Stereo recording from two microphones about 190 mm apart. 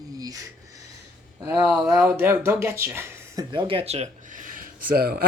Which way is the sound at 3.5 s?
25° right (ahead or behind).